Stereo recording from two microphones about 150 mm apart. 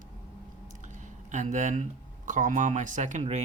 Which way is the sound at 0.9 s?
55° right (ahead or behind).